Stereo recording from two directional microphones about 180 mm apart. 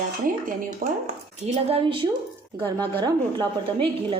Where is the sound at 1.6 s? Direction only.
30° right (ahead or behind).